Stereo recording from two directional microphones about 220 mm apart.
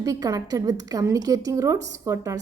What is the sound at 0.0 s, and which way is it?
A woman's voice, 15° right (ahead or behind).